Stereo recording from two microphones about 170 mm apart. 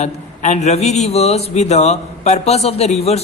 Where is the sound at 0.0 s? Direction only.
45° left (ahead or behind).